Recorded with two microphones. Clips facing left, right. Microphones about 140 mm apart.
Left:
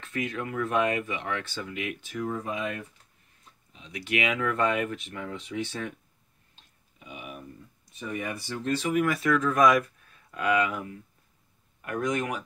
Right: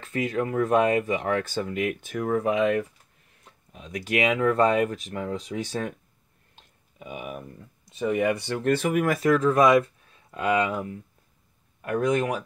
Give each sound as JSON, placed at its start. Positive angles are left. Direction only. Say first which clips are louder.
{"t": 0.0, "sound": "speech", "louder": "right 6 dB", "side_deg": -35}
{"t": 3.4, "sound": "speech", "louder": "right 6 dB", "side_deg": -50}
{"t": 6.5, "sound": "a sound", "louder": "right 6 dB", "side_deg": -50}
{"t": 8.0, "sound": "speech", "louder": "right 10 dB", "side_deg": -80}
{"t": 9.0, "sound": "speech", "louder": "right 4 dB", "side_deg": -40}